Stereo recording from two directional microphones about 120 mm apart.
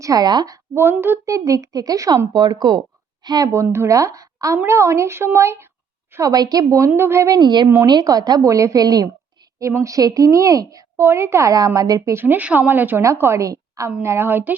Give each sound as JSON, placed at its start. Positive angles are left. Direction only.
{"t": 0.0, "sound": "a woman's voice", "side_deg": -30}
{"t": 0.8, "sound": "a woman's voice", "side_deg": -20}
{"t": 12.2, "sound": "a woman's voice", "side_deg": -15}